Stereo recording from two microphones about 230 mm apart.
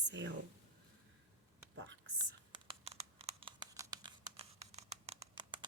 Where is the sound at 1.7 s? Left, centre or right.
Right.